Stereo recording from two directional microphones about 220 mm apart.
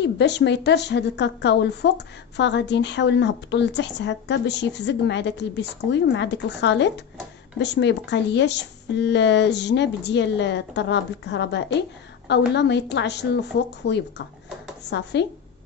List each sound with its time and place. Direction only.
0.0 s a woman's voice: 50° left (ahead or behind)